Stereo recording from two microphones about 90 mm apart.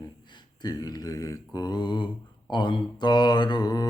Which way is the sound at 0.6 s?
50° left (ahead or behind).